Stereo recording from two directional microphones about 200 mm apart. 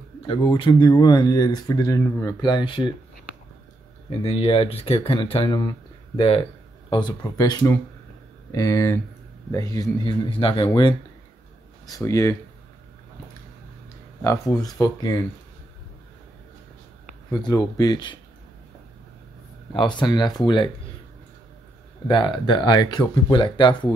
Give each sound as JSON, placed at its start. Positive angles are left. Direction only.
{"t": 0.3, "sound": "speech", "side_deg": 25}
{"t": 4.2, "sound": "speech", "side_deg": 30}
{"t": 14.2, "sound": "speech", "side_deg": 15}
{"t": 17.3, "sound": "speech", "side_deg": 20}
{"t": 19.7, "sound": "speech", "side_deg": 25}
{"t": 22.0, "sound": "speech", "side_deg": 25}